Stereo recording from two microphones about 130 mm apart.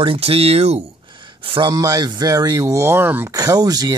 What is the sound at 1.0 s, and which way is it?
Speech, 40° right (ahead or behind).